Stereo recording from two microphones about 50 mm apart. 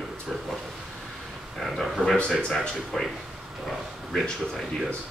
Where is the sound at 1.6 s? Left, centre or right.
Centre.